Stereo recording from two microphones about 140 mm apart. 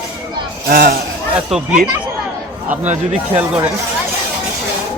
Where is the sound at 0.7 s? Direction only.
90° right.